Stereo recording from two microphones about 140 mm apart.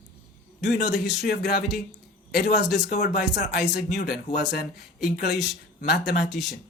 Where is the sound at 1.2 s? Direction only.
90° left.